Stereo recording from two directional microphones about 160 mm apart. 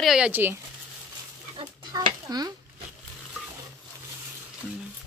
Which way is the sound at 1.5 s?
30° right (ahead or behind).